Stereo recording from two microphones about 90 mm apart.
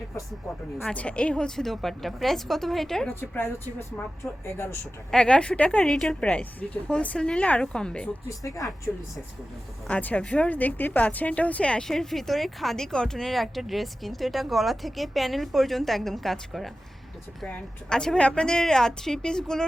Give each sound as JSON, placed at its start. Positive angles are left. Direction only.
{"t": 0.9, "sound": "a woman's voice", "side_deg": 10}
{"t": 3.1, "sound": "speech", "side_deg": 25}
{"t": 5.1, "sound": "a woman's voice", "side_deg": 10}
{"t": 8.3, "sound": "speech", "side_deg": 40}
{"t": 9.9, "sound": "a woman's voice", "side_deg": 15}
{"t": 17.4, "sound": "a woman's voice", "side_deg": 10}